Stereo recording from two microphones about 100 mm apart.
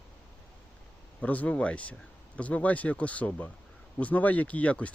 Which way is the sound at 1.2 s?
15° left (ahead or behind).